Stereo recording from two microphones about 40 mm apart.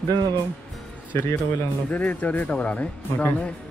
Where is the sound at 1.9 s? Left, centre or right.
Left.